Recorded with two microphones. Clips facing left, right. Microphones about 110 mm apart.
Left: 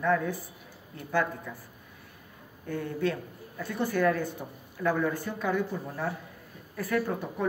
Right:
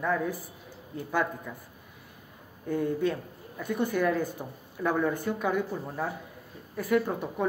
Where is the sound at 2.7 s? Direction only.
15° right (ahead or behind).